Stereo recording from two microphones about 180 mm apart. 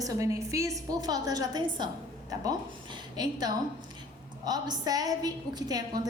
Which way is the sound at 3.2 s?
20° right (ahead or behind).